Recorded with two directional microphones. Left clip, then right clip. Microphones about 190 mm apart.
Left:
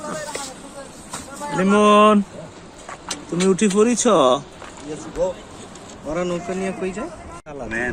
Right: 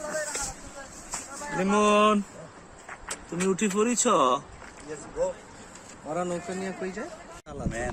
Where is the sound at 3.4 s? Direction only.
5° right (ahead or behind).